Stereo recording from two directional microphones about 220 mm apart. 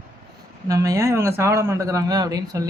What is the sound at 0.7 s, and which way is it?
Speech, 15° right (ahead or behind).